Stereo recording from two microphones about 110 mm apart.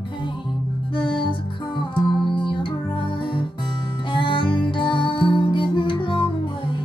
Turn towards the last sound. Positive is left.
turn(degrees=50)  # may be behind; listen again after turning